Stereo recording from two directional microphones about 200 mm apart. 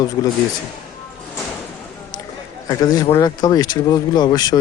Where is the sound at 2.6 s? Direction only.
20° left (ahead or behind).